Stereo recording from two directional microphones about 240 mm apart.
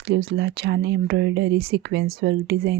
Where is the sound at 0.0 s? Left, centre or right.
Right.